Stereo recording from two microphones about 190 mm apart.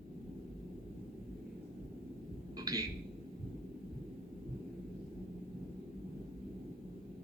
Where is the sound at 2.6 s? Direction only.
20° right (ahead or behind).